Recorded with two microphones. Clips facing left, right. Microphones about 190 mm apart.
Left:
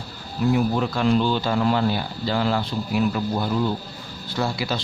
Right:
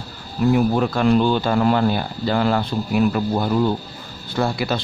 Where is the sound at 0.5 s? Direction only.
55° right (ahead or behind).